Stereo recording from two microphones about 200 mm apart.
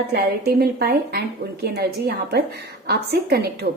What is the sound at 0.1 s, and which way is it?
A woman's voice, 55° right (ahead or behind).